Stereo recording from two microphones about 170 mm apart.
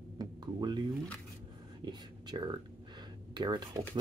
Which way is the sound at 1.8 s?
25° right (ahead or behind).